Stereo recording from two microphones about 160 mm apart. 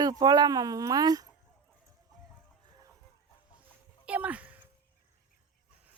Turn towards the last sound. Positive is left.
turn(degrees=-10)  # may be behind; listen again after turning